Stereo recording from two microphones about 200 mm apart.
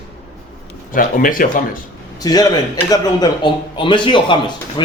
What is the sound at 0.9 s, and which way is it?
Speech, 45° left (ahead or behind).